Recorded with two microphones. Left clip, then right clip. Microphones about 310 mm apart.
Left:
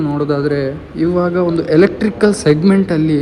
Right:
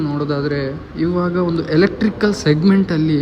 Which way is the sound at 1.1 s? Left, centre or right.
Left.